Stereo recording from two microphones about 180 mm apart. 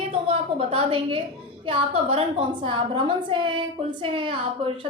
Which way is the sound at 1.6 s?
30° right (ahead or behind).